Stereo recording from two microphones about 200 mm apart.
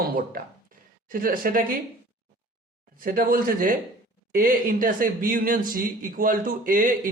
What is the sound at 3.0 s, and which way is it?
Speech, 45° right (ahead or behind).